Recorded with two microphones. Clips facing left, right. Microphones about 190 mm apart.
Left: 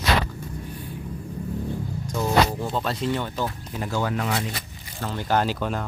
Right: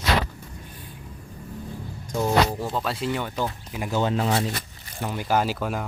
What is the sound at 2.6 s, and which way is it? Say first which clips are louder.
Speech: left 1 dB; 5° right (ahead or behind).